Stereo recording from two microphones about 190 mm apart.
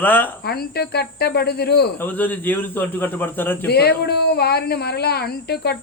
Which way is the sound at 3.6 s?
55° left (ahead or behind).